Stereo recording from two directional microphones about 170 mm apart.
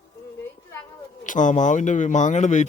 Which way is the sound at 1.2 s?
50° left (ahead or behind).